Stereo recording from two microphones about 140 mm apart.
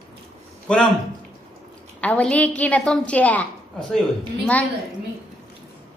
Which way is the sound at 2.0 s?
10° left (ahead or behind).